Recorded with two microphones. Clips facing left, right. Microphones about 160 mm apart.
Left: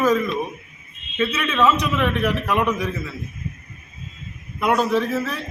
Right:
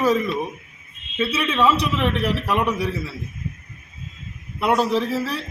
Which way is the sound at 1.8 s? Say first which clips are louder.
Left 1 dB; 30° right (ahead or behind).